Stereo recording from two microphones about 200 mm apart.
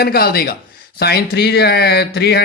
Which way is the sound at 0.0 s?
50° left (ahead or behind).